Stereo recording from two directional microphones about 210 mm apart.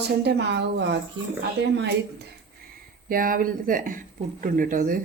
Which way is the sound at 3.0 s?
40° right (ahead or behind).